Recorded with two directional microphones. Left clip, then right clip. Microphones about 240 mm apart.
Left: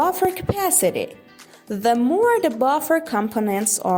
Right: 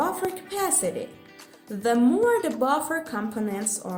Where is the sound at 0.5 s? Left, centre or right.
Left.